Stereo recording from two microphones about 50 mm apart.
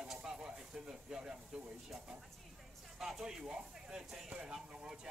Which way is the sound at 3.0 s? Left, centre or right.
Centre.